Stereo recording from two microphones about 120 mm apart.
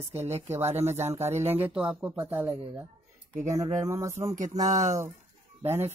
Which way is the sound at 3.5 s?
25° right (ahead or behind).